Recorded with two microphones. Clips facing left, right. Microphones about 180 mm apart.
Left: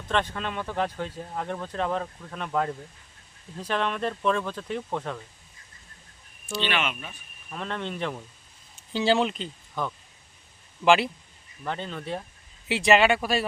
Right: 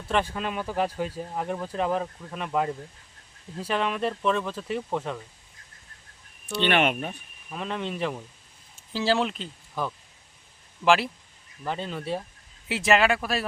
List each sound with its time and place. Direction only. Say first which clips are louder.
0.1 s speech: right 1 dB; 10° right (ahead or behind)
6.7 s speech: right 8 dB; 55° right (ahead or behind)
7.5 s speech: right 1 dB; 5° right (ahead or behind)